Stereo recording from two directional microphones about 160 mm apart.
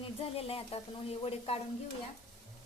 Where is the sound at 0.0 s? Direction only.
35° left (ahead or behind).